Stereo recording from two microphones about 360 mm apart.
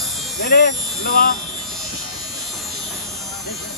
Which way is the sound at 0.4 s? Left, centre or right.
Left.